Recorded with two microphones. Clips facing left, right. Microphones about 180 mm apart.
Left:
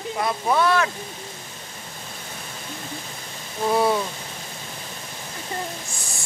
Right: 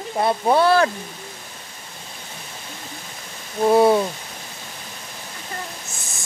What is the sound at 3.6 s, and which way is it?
Speech, 25° right (ahead or behind).